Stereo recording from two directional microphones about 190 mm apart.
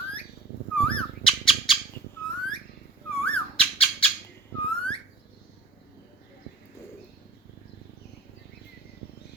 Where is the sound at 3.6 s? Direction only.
30° left (ahead or behind).